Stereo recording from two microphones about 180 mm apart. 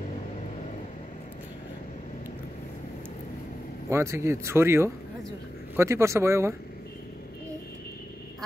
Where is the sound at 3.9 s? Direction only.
15° right (ahead or behind).